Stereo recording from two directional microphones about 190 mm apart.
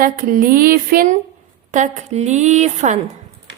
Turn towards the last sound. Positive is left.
turn(degrees=-35)  # may be behind; listen again after turning